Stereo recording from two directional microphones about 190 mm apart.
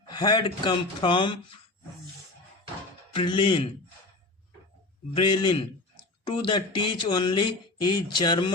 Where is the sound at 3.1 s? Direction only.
25° left (ahead or behind).